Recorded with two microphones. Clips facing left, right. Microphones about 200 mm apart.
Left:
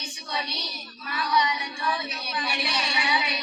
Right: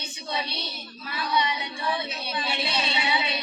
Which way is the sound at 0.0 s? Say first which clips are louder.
Right 2 dB; 25° right (ahead or behind).